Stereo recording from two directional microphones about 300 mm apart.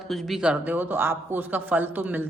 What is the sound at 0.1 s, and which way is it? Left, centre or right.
Speech, centre.